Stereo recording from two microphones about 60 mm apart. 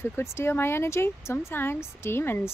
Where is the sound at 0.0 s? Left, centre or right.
Left.